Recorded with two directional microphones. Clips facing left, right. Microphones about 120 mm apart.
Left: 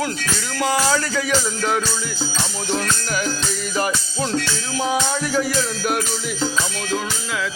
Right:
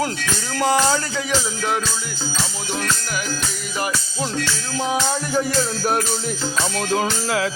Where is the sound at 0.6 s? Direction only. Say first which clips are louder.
Right 1 dB; 30° right (ahead or behind).